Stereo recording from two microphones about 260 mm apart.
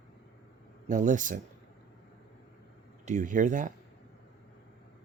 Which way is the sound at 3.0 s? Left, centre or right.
Right.